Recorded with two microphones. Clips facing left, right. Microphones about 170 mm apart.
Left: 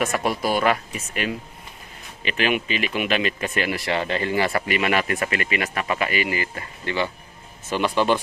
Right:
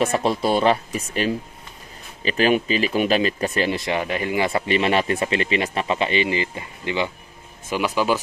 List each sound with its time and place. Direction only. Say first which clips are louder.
0.0 s speech: right 3 dB; 30° right (ahead or behind); by 8.2 s 5° right (ahead or behind)